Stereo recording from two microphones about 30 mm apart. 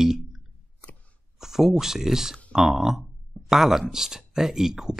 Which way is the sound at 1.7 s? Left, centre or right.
Centre.